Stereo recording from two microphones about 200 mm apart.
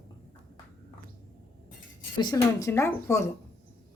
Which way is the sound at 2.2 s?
20° left (ahead or behind).